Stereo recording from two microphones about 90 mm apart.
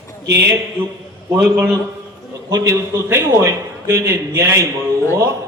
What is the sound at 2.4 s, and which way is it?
A man's voice, 35° right (ahead or behind).